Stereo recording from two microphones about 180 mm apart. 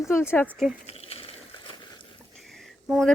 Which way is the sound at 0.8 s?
35° left (ahead or behind).